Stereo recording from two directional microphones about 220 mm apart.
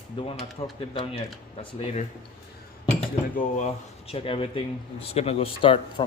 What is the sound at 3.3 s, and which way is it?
Speech, 35° left (ahead or behind).